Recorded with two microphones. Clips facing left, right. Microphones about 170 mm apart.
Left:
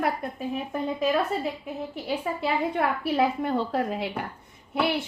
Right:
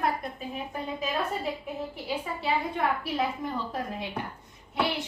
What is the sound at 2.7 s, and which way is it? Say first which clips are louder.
A woman's voice: left 4 dB; 70° left (ahead or behind).